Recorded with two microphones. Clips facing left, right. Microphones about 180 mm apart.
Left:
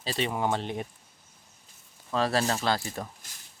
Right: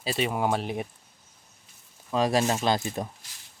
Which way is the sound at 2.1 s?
15° right (ahead or behind).